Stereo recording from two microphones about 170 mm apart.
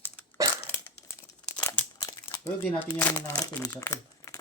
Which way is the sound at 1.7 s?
25° left (ahead or behind).